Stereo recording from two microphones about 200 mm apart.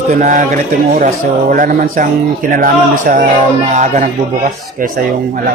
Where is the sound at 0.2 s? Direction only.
40° right (ahead or behind).